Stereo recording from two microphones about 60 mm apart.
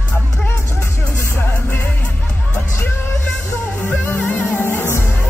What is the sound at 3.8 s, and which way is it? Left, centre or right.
Music, left.